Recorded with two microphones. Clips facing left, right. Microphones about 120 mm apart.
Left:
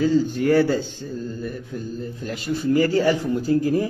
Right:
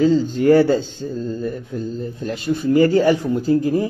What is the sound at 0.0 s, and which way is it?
Speech, 20° right (ahead or behind).